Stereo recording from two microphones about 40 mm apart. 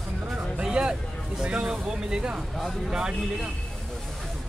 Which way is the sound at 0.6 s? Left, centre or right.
Right.